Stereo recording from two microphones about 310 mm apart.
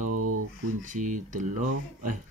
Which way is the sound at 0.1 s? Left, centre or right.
Right.